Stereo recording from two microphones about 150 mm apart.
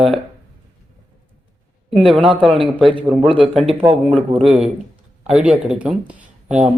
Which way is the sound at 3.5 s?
Centre (ahead or behind).